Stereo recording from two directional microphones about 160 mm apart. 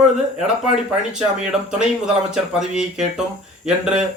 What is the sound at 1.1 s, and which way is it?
Speech, 5° right (ahead or behind).